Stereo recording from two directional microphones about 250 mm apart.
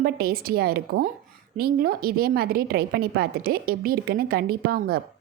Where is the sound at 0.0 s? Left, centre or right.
Right.